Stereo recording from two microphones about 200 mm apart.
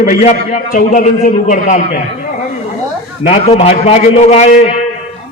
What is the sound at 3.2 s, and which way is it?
A man's voice, 35° left (ahead or behind).